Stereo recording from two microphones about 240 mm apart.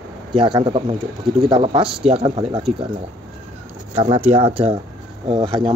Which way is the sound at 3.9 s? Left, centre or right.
Right.